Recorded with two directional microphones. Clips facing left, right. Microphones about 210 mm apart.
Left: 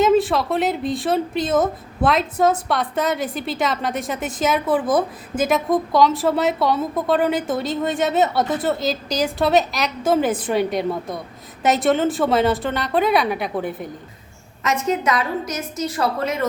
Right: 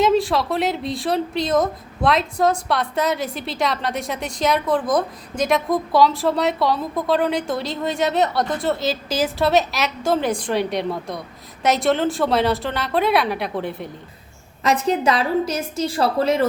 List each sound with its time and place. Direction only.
0.0 s a woman's voice: centre (ahead or behind)
14.6 s a woman's voice: 35° right (ahead or behind)